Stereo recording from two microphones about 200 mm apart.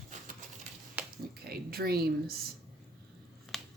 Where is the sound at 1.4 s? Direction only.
50° right (ahead or behind).